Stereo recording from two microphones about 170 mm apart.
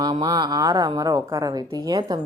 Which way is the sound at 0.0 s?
25° right (ahead or behind).